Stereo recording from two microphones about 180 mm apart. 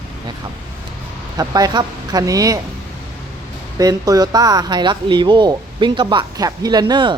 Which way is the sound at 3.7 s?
20° right (ahead or behind).